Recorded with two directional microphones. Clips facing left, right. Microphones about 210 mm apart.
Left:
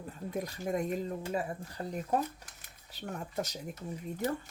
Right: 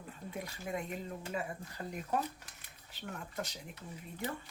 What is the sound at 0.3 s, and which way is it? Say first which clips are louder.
Speech: left 6 dB; 40° left (ahead or behind).